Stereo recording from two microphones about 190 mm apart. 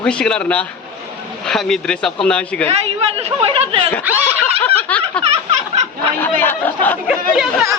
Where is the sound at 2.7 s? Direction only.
35° right (ahead or behind).